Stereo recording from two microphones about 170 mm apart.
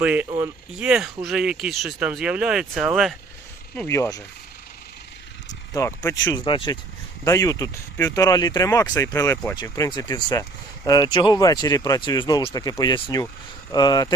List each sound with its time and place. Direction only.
0.0 s speech: 5° right (ahead or behind)
3.8 s speech: 15° left (ahead or behind)
5.7 s speech: 15° left (ahead or behind)
6.2 s speech: 30° left (ahead or behind)
7.3 s speech: 20° left (ahead or behind)